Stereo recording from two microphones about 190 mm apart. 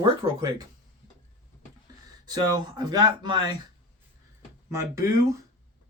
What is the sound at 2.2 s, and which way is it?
Speech, 20° right (ahead or behind).